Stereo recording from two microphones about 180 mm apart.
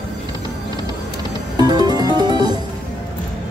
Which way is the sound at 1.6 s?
20° right (ahead or behind).